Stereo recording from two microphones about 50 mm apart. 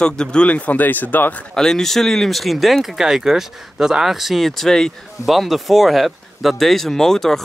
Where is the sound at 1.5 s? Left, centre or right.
Centre.